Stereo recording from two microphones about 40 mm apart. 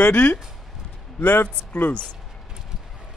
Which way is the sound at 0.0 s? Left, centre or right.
Left.